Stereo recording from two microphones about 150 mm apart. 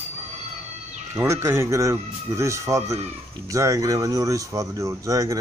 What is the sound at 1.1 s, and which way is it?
Speech, 20° right (ahead or behind).